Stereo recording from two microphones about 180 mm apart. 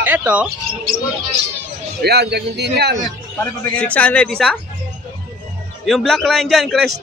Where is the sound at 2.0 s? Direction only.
65° right (ahead or behind).